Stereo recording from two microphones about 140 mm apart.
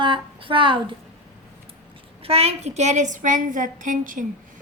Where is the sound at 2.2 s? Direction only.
45° right (ahead or behind).